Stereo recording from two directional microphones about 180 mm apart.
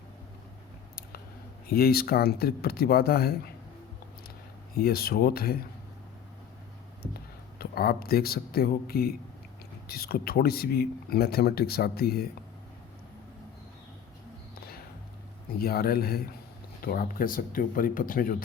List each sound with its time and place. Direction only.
1.6 s speech: 60° left (ahead or behind)
4.8 s speech: 60° left (ahead or behind)
7.6 s speech: 55° left (ahead or behind)
15.5 s speech: 55° left (ahead or behind)